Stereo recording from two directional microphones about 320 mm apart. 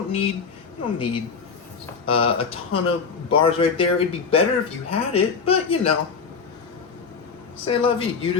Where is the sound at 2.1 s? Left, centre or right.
Centre.